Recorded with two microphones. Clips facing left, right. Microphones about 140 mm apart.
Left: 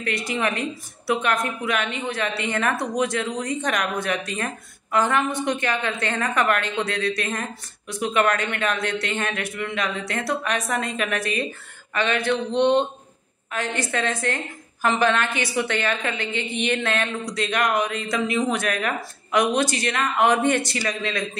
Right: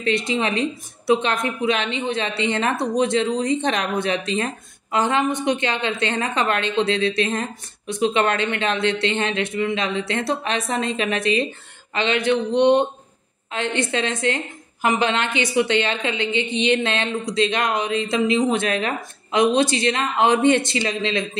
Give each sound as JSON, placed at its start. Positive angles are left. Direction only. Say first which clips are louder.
{"t": 0.0, "sound": "a woman's voice", "louder": "right 3 dB", "side_deg": -20}